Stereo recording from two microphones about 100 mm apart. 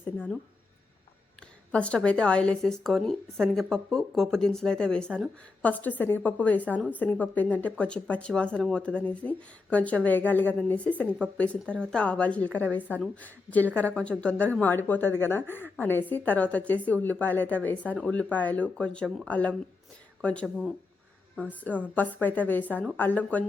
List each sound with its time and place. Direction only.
1.7 s a woman's voice: 10° left (ahead or behind)